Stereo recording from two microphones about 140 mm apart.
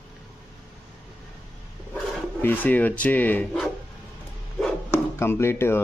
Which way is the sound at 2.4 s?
10° left (ahead or behind).